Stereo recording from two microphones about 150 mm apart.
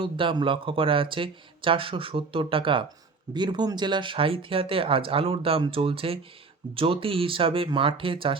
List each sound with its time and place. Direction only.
0.0 s speech: 35° right (ahead or behind)